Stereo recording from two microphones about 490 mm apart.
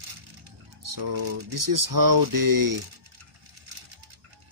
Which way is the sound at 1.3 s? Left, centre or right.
Right.